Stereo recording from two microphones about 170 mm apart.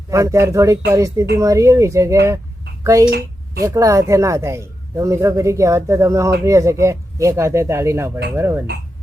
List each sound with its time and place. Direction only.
0.1 s speech: 20° right (ahead or behind)
3.1 s a sound: 65° right (ahead or behind)
3.6 s speech: 20° right (ahead or behind)